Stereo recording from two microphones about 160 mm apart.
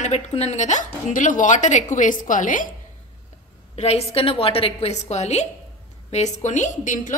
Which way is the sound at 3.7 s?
40° left (ahead or behind).